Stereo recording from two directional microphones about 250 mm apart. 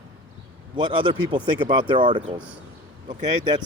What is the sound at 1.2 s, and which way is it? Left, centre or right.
Speech, centre.